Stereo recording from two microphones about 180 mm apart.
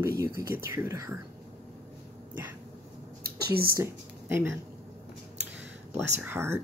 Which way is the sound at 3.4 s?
60° right (ahead or behind).